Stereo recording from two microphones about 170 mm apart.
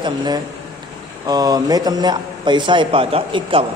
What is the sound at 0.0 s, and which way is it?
A man's voice, 25° right (ahead or behind).